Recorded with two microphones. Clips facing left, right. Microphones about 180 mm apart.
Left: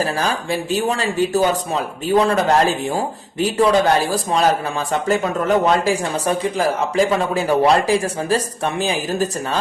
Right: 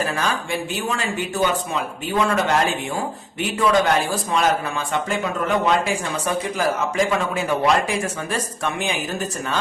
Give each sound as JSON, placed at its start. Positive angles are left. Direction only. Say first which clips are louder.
{"t": 0.0, "sound": "speech", "louder": "left 3 dB", "side_deg": 35}